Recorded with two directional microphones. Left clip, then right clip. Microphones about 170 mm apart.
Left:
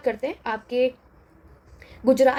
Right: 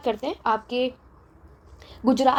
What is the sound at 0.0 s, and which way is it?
Speech, 30° right (ahead or behind).